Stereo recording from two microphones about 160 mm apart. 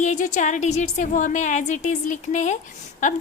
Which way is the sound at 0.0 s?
50° left (ahead or behind).